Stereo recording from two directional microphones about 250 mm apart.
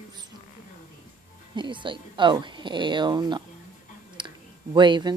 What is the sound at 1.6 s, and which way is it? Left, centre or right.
Speech, centre.